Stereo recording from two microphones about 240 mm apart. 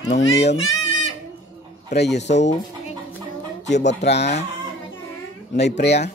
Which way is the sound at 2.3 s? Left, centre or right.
Left.